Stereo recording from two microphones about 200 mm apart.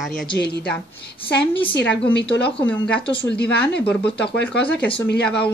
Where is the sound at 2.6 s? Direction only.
10° left (ahead or behind).